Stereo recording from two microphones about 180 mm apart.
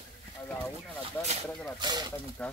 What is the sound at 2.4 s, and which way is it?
Speech, 5° left (ahead or behind).